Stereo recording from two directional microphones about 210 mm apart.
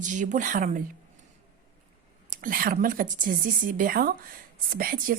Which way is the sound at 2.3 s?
40° right (ahead or behind).